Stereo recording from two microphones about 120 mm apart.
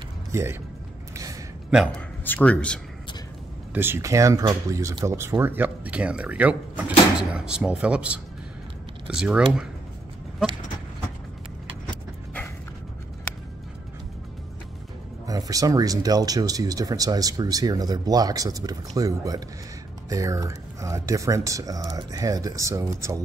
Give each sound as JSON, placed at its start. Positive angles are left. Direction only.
{"t": 0.3, "sound": "speech", "side_deg": -25}
{"t": 2.0, "sound": "speech", "side_deg": 15}
{"t": 3.7, "sound": "speech", "side_deg": -20}
{"t": 15.2, "sound": "speech", "side_deg": -30}